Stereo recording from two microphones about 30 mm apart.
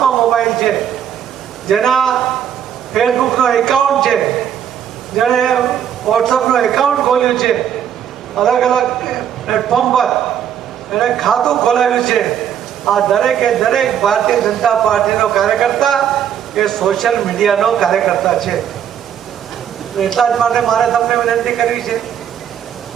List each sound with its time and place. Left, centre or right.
0.0 s a sound: centre
1.6 s a man's voice: centre
20.1 s a man's voice: centre
20.3 s speech: centre